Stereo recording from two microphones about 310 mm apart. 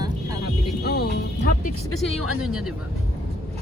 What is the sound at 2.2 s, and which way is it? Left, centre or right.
Speech, right.